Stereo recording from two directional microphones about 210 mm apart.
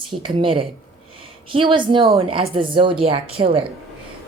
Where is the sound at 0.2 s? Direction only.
25° right (ahead or behind).